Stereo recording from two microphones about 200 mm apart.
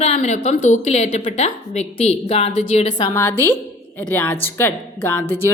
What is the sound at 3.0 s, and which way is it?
A woman's voice, 10° left (ahead or behind).